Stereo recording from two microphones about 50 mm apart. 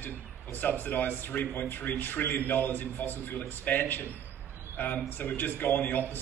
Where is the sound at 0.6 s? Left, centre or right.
Left.